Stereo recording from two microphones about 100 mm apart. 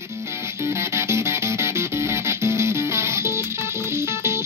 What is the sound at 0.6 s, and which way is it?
Music, 30° right (ahead or behind).